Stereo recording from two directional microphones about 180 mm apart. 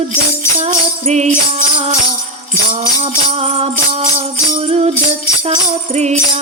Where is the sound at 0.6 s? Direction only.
35° right (ahead or behind).